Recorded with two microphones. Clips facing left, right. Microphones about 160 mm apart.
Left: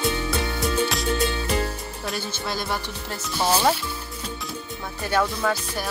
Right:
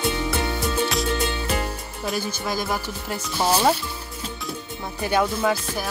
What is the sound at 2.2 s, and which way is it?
Speech, 10° right (ahead or behind).